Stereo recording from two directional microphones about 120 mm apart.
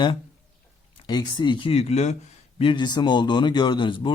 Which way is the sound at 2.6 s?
40° left (ahead or behind).